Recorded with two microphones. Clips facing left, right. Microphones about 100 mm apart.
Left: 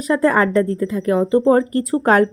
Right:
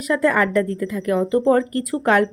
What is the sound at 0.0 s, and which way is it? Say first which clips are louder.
A woman's voice: left 3 dB; 35° left (ahead or behind).